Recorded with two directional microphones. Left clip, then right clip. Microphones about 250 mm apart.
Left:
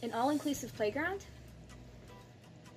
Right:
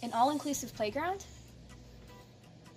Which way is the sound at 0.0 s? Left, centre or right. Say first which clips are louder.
Right 4 dB; right.